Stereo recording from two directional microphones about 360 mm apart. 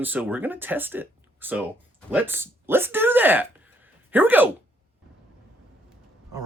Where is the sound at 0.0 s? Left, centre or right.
Centre.